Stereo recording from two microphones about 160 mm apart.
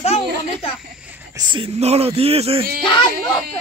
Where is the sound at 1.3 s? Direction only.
25° right (ahead or behind).